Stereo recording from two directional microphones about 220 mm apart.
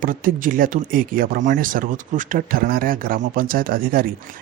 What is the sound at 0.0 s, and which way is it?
Speech, 40° right (ahead or behind).